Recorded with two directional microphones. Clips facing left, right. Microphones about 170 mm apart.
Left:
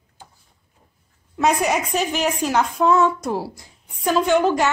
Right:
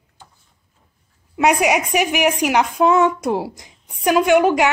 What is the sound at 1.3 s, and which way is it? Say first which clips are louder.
A woman's voice: right 3 dB; 15° right (ahead or behind).